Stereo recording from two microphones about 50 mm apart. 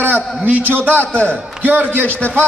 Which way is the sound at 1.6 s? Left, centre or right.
Right.